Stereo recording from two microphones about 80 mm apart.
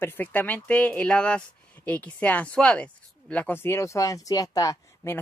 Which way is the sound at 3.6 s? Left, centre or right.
Left.